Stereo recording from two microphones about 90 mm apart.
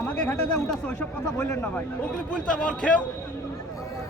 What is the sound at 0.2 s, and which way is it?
Speech, 10° left (ahead or behind).